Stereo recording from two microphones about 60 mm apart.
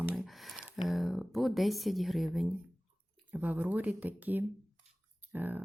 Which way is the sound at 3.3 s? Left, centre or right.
Right.